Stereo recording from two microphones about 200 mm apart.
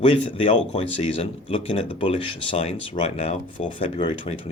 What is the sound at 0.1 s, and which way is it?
Speech, 30° left (ahead or behind).